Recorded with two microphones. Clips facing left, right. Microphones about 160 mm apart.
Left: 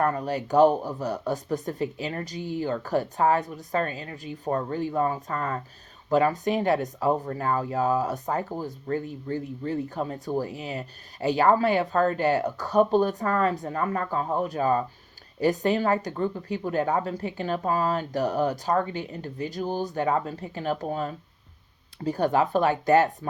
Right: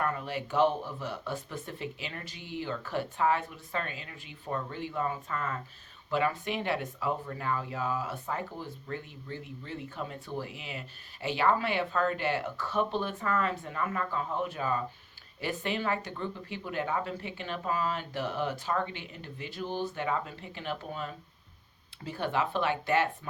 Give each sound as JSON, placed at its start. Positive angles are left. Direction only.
{"t": 0.0, "sound": "speech", "side_deg": 40}